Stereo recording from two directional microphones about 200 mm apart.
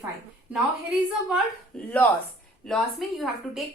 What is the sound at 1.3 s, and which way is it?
A woman's voice, centre (ahead or behind).